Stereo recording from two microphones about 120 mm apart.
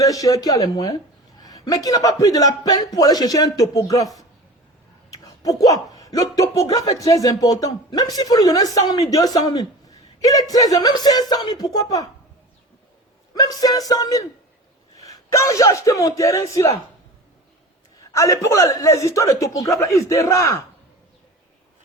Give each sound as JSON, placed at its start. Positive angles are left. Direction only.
{"t": 0.0, "sound": "a man's voice", "side_deg": 30}
{"t": 13.3, "sound": "a man's voice", "side_deg": 30}
{"t": 18.1, "sound": "a man's voice", "side_deg": 25}